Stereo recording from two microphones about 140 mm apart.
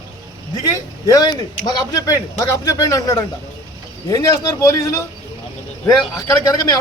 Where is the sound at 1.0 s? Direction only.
25° left (ahead or behind).